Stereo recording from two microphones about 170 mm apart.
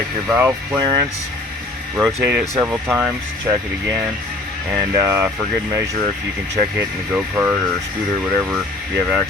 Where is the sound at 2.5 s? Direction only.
15° right (ahead or behind).